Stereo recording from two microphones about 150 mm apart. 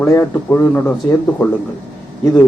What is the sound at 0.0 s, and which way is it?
Speech, 15° left (ahead or behind).